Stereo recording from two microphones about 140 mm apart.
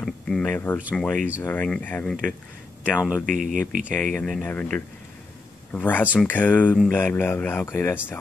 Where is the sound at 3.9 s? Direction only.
Centre (ahead or behind).